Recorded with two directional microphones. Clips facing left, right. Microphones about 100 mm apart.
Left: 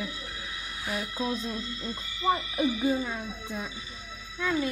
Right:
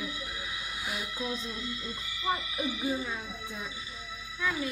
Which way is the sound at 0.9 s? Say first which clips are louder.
Left 6 dB; 35° left (ahead or behind).